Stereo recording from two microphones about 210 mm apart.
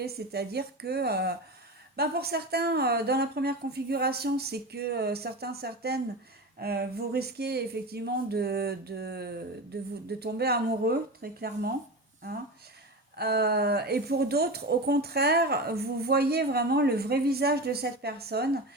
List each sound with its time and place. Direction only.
0.0 s speech: 50° right (ahead or behind)
13.1 s speech: 50° right (ahead or behind)